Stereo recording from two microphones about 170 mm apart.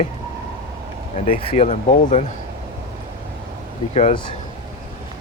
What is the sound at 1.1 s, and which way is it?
Speech, 35° left (ahead or behind).